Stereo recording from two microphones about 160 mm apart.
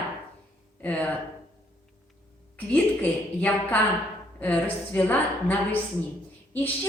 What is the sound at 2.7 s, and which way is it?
A woman's voice, 10° left (ahead or behind).